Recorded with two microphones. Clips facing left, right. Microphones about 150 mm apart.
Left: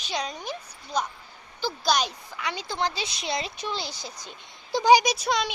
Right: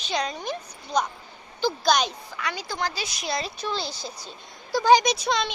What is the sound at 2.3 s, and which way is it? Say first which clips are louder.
Speech: left 1 dB; 20° left (ahead or behind).